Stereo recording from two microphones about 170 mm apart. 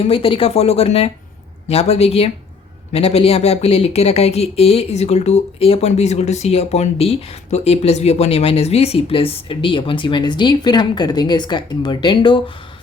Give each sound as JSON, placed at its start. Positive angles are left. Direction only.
{"t": 0.0, "sound": "speech", "side_deg": 35}